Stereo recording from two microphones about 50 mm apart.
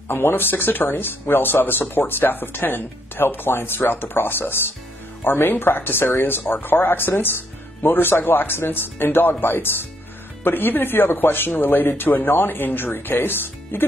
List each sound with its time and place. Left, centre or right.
0.1 s speech: left